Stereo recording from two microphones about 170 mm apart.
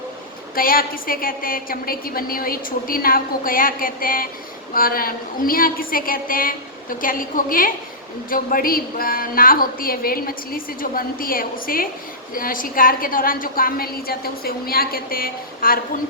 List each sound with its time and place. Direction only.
0.5 s a woman's voice: 60° left (ahead or behind)